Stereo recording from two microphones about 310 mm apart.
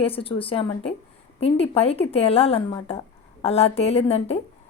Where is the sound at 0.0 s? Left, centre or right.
Centre.